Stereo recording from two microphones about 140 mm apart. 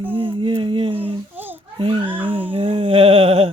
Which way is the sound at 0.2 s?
35° right (ahead or behind).